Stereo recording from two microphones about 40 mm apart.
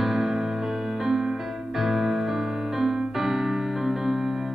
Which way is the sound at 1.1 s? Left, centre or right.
Centre.